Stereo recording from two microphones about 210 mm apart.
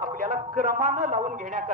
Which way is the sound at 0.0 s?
40° right (ahead or behind).